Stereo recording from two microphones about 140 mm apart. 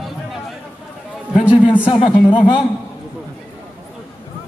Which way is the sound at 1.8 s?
40° left (ahead or behind).